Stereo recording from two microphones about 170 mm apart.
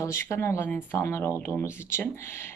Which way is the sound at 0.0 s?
15° left (ahead or behind).